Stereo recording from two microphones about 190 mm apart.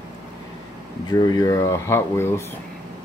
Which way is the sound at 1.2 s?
20° left (ahead or behind).